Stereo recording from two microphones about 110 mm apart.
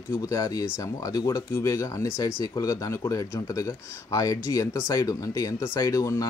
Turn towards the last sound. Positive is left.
turn(degrees=30)  # may be behind; listen again after turning